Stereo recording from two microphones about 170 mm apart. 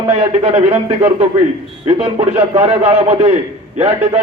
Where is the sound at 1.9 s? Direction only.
35° right (ahead or behind).